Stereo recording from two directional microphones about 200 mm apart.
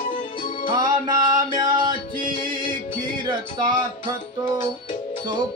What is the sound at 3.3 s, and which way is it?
Music, 20° right (ahead or behind).